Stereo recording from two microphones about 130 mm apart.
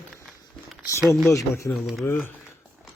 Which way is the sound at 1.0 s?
Centre (ahead or behind).